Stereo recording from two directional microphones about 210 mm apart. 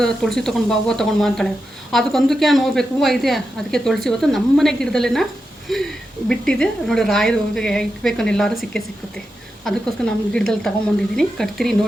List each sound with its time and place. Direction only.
0.0 s a woman's voice: 5° left (ahead or behind)